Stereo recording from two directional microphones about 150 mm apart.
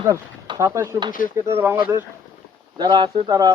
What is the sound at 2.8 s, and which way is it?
Speech, 30° right (ahead or behind).